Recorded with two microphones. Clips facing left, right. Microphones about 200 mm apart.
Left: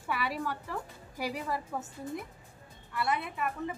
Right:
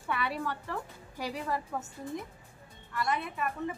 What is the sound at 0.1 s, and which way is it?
A woman's voice, 5° left (ahead or behind).